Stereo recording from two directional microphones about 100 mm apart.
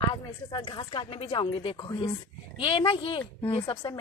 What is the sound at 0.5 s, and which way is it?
A woman's voice, 50° left (ahead or behind).